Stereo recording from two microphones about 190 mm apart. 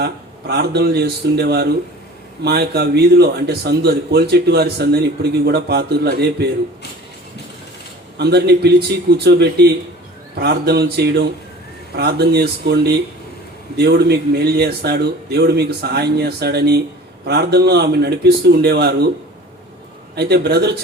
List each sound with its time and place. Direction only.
0.0 s speech: 60° right (ahead or behind)
8.2 s speech: 60° right (ahead or behind)
20.1 s speech: 60° right (ahead or behind)